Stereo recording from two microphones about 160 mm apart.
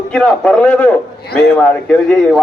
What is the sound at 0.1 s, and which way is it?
Speech, 5° left (ahead or behind).